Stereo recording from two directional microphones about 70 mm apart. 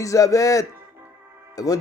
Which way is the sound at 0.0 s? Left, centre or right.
Left.